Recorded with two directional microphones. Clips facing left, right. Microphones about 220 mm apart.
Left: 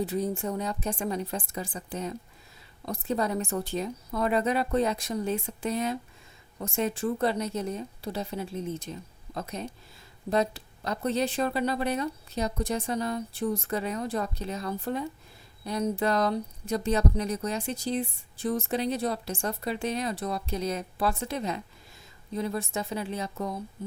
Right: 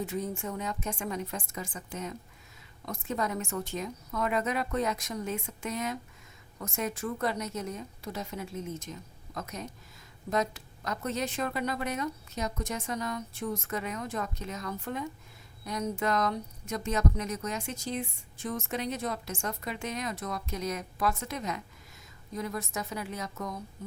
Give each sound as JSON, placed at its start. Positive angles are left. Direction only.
{"t": 0.0, "sound": "a woman's voice", "side_deg": 35}